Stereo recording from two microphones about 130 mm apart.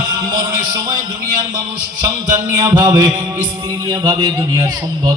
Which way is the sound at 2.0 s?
30° right (ahead or behind).